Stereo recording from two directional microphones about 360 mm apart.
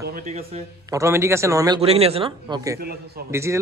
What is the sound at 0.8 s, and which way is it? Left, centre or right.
Speech, centre.